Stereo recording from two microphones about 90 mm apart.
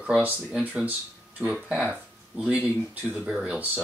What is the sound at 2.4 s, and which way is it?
Speech, 15° right (ahead or behind).